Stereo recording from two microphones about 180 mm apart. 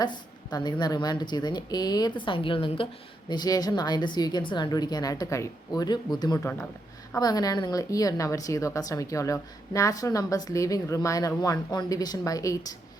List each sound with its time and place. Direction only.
0.0 s a woman's voice: 25° left (ahead or behind)